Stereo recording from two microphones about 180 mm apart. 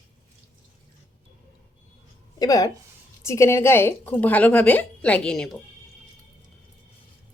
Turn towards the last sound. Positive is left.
turn(degrees=5)  # may be behind; listen again after turning